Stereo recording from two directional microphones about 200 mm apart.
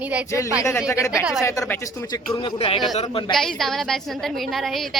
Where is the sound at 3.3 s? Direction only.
Centre (ahead or behind).